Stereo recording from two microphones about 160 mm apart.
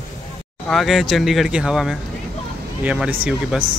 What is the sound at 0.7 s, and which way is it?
Speech, centre (ahead or behind).